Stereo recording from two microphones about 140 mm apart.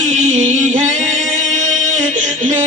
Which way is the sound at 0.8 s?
55° right (ahead or behind).